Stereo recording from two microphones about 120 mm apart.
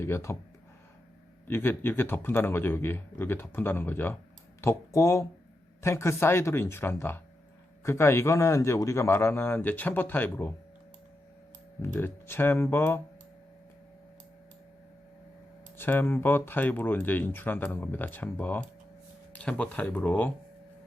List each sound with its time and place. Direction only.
0.0 s a man's voice: 20° left (ahead or behind)
1.5 s a man's voice: 20° left (ahead or behind)
11.9 s a man's voice: 20° left (ahead or behind)
15.8 s speech: 15° left (ahead or behind)